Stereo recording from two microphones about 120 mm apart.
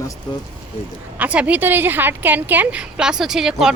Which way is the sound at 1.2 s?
10° right (ahead or behind).